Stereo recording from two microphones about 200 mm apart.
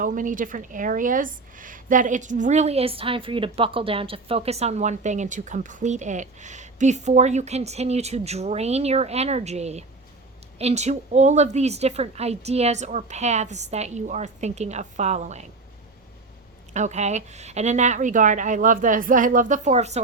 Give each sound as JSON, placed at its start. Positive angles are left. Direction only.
{"t": 0.0, "sound": "a woman's voice", "side_deg": -40}
{"t": 16.7, "sound": "a woman's voice", "side_deg": -35}